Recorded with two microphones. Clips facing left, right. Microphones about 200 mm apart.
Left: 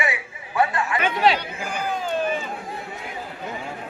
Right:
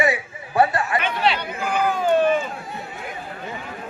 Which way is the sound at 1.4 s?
55° right (ahead or behind).